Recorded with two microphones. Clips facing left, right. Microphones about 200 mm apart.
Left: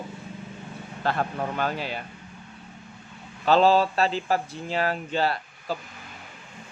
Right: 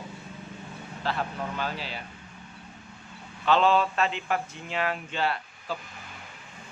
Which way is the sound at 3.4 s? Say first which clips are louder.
Left 3 dB; 35° left (ahead or behind).